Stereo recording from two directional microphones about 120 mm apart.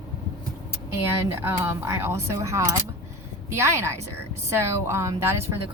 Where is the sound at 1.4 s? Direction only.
20° right (ahead or behind).